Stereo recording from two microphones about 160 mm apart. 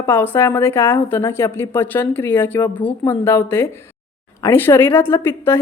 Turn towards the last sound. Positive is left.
turn(degrees=15)  # may be behind; listen again after turning